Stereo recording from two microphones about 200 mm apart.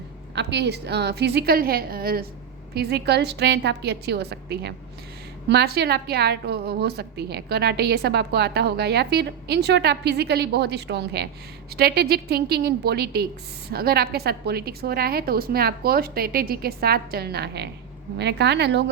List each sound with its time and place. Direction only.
0.3 s a woman's voice: 60° right (ahead or behind)